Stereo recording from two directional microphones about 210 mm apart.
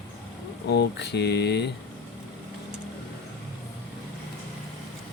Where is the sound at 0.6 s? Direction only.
50° left (ahead or behind).